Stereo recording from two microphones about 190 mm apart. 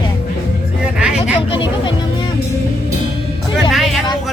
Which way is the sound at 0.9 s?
5° right (ahead or behind).